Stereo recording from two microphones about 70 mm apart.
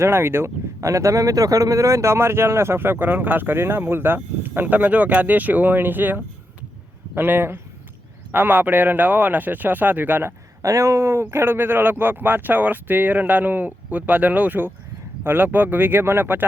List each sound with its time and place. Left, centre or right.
0.0 s speech: right
10.6 s speech: right